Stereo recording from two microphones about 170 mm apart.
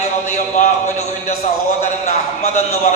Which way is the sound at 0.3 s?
40° left (ahead or behind).